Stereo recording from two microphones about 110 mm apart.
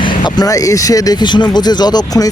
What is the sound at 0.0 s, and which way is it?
Speech, 45° left (ahead or behind).